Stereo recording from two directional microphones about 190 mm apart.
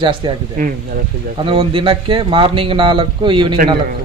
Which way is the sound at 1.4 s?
30° right (ahead or behind).